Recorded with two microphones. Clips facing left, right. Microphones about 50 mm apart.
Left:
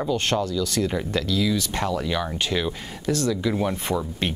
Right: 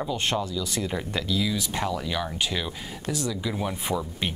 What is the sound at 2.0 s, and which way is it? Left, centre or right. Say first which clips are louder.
Speech: left 3 dB; centre.